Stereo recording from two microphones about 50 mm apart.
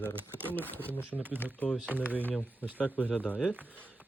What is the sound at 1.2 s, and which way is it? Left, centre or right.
Speech, right.